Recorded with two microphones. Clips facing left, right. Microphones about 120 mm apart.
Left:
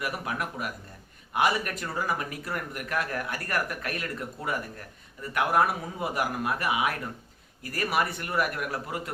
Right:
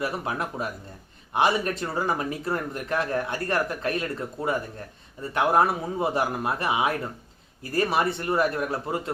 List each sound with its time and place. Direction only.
0.0 s speech: 30° right (ahead or behind)